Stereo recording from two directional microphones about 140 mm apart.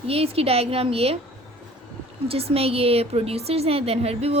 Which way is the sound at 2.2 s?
45° right (ahead or behind).